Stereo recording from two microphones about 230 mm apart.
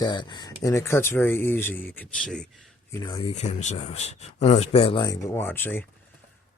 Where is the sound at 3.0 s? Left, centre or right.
Centre.